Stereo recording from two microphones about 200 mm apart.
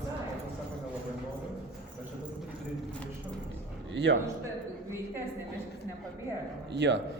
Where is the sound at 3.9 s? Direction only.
60° right (ahead or behind).